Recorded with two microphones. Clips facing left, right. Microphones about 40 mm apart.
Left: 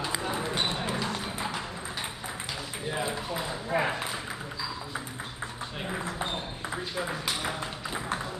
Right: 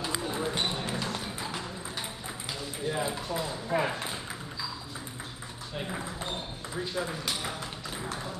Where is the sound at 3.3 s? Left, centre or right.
Centre.